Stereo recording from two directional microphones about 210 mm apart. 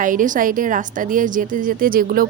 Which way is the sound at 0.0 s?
40° right (ahead or behind).